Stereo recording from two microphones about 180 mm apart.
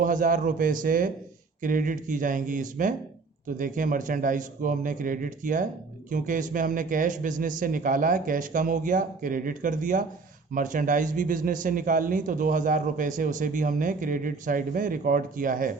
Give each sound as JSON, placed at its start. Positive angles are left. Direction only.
{"t": 0.0, "sound": "a man's voice", "side_deg": -50}